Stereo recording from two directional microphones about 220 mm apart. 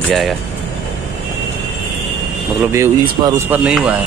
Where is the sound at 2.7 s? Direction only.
15° right (ahead or behind).